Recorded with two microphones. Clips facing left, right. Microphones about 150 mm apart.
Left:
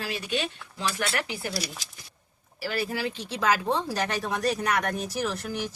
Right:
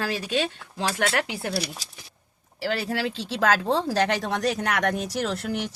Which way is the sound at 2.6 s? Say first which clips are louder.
Right 3 dB; 90° right.